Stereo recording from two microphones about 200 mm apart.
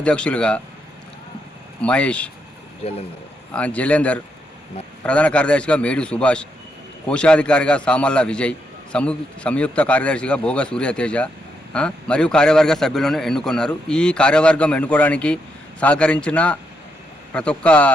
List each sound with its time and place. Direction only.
0.0 s a man's voice: 5° left (ahead or behind)
1.8 s a man's voice: 5° left (ahead or behind)
2.8 s speech: 30° left (ahead or behind)
3.5 s a man's voice: 5° left (ahead or behind)